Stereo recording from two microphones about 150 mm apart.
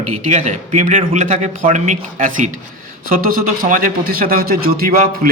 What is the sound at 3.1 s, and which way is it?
A man's voice, 70° right (ahead or behind).